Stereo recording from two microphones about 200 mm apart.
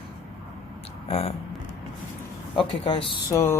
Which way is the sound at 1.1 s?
30° left (ahead or behind).